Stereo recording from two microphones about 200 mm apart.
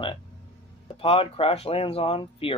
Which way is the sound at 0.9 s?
25° left (ahead or behind).